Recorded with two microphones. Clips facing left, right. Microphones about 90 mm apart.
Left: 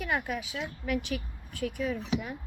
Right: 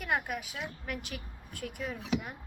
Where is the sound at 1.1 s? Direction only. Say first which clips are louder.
Left 8 dB; 55° left (ahead or behind).